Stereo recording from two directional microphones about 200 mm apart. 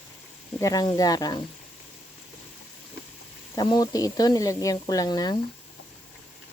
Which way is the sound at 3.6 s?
20° left (ahead or behind).